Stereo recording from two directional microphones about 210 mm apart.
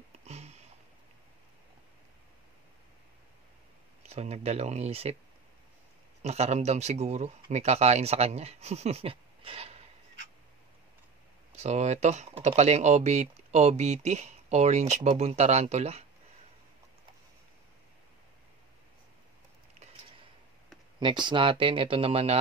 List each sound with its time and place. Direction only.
0.2 s sniff: 30° right (ahead or behind)
4.1 s speech: 30° right (ahead or behind)
6.2 s speech: 30° right (ahead or behind)
11.5 s speech: 30° right (ahead or behind)
21.0 s speech: 20° right (ahead or behind)